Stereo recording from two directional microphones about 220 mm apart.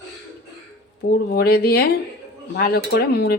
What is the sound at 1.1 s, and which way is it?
A woman's voice, 45° left (ahead or behind).